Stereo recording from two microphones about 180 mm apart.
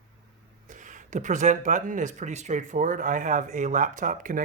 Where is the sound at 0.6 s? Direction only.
45° right (ahead or behind).